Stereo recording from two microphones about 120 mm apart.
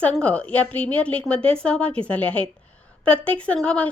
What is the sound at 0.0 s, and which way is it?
A woman's voice, 10° left (ahead or behind).